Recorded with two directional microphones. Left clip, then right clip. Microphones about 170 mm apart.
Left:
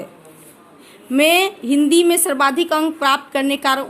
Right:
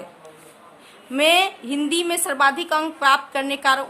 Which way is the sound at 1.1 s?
25° left (ahead or behind).